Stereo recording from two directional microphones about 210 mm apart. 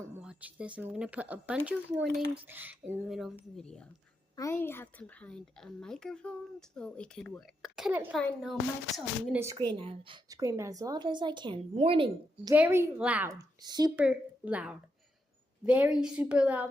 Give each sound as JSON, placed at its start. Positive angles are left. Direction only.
{"t": 0.0, "sound": "a sound", "side_deg": -5}
{"t": 0.8, "sound": "speech", "side_deg": -5}
{"t": 9.7, "sound": "a woman's voice", "side_deg": -25}
{"t": 12.5, "sound": "speech", "side_deg": -10}
{"t": 13.9, "sound": "speech", "side_deg": -5}